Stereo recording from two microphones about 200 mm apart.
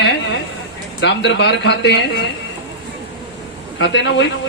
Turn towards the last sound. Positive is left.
turn(degrees=65)  # may be behind; listen again after turning